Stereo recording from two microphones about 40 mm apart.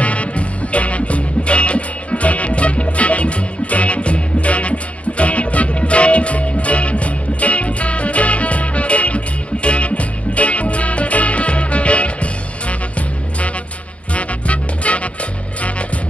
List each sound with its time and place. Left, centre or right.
0.0 s music: left
14.1 s music: left